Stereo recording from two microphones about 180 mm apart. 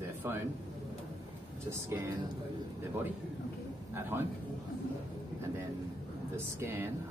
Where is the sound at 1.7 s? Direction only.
20° right (ahead or behind).